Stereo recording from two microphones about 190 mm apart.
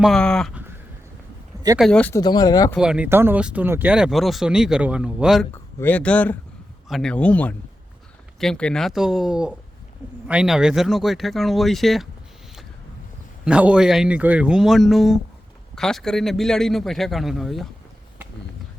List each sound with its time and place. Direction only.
0.0 s speech: 5° left (ahead or behind)
1.8 s speech: 5° left (ahead or behind)
2.2 s speech: 20° left (ahead or behind)
2.7 s speech: 5° right (ahead or behind)
5.5 s speech: 10° left (ahead or behind)
13.4 s speech: 5° right (ahead or behind)